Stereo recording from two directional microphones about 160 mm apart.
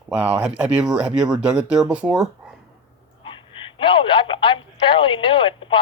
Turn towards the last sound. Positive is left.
turn(degrees=30)  # may be behind; listen again after turning